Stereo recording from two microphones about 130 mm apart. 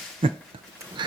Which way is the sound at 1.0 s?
35° right (ahead or behind).